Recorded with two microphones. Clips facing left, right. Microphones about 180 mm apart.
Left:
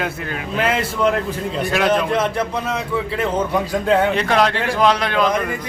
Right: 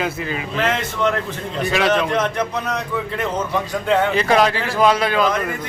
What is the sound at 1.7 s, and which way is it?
A man's voice, centre (ahead or behind).